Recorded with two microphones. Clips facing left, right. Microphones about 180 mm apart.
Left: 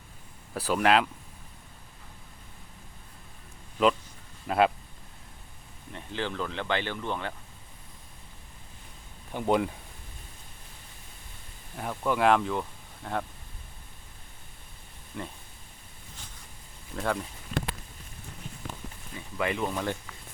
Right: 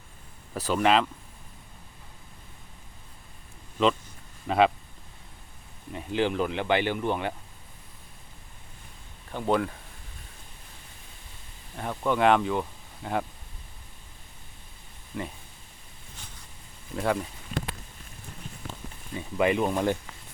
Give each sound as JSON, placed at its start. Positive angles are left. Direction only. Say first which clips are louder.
{"t": 0.5, "sound": "speech", "louder": "right 1 dB", "side_deg": 5}
{"t": 4.4, "sound": "speech", "louder": "right 2 dB", "side_deg": 0}
{"t": 5.9, "sound": "speech", "louder": "right 7 dB", "side_deg": -10}
{"t": 9.3, "sound": "speech", "louder": "even", "side_deg": 15}
{"t": 11.8, "sound": "speech", "louder": "right 2 dB", "side_deg": 5}
{"t": 15.1, "sound": "speech", "louder": "right 3 dB", "side_deg": 0}
{"t": 16.9, "sound": "speech", "louder": "right 3 dB", "side_deg": -5}
{"t": 19.1, "sound": "speech", "louder": "right 6 dB", "side_deg": -20}